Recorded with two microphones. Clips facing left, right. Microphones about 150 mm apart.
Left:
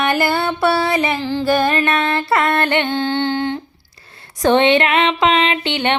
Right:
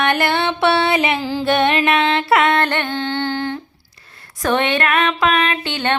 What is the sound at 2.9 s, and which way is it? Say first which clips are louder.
Humming: left 3 dB; 30° left (ahead or behind).